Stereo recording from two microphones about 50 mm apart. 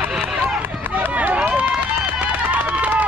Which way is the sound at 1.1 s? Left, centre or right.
Right.